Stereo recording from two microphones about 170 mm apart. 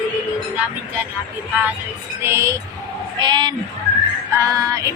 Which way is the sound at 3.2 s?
25° right (ahead or behind).